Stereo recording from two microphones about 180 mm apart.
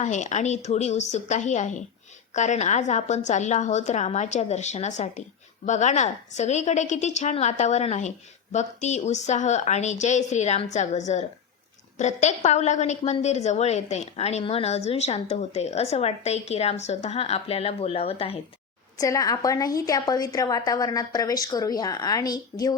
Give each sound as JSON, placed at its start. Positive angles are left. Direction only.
{"t": 0.0, "sound": "a woman's voice", "side_deg": 40}
{"t": 18.9, "sound": "a woman's voice", "side_deg": 20}